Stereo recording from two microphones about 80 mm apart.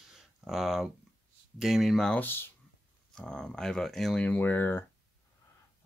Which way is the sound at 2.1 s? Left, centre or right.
Left.